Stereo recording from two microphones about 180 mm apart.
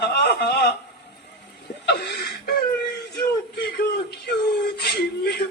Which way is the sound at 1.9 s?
65° left (ahead or behind).